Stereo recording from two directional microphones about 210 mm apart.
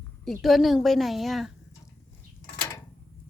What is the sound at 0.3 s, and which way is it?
Speech, centre (ahead or behind).